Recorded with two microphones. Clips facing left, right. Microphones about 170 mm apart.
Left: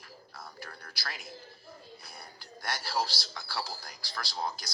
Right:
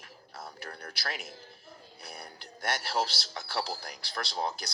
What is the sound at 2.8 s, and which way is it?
Speech, 65° right (ahead or behind).